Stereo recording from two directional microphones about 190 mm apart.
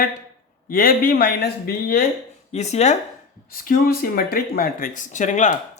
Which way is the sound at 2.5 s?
35° left (ahead or behind).